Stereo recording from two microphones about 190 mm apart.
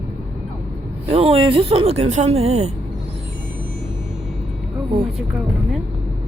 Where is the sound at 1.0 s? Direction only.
30° right (ahead or behind).